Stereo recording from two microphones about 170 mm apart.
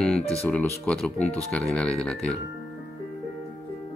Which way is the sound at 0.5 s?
5° left (ahead or behind).